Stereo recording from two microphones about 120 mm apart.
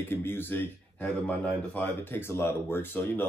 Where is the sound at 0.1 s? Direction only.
20° left (ahead or behind).